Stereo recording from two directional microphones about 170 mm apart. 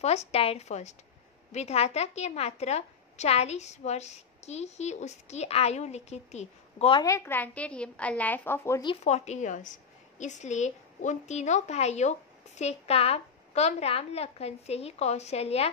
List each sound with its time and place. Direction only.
0.0 s a woman's voice: 40° left (ahead or behind)
7.1 s a woman's voice: 15° left (ahead or behind)
9.0 s a woman's voice: 40° left (ahead or behind)